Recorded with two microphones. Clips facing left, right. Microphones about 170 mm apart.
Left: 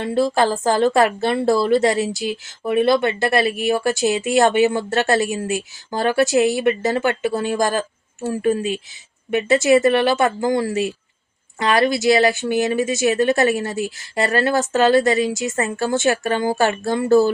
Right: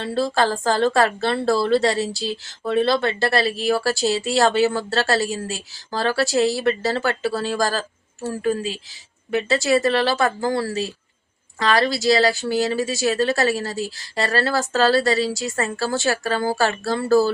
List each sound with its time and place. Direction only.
0.0 s a woman's voice: 20° left (ahead or behind)